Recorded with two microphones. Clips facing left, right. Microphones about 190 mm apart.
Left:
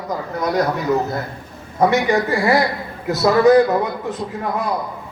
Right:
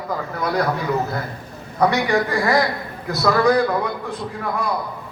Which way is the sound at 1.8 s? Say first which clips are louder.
Left 2 dB; 20° left (ahead or behind).